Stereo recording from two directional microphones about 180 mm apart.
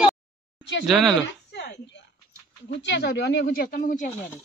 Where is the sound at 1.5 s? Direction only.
70° left (ahead or behind).